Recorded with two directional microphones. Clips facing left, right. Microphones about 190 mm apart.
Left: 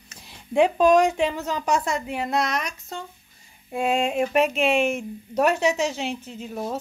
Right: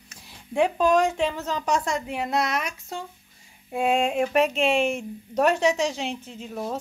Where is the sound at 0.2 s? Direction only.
20° left (ahead or behind).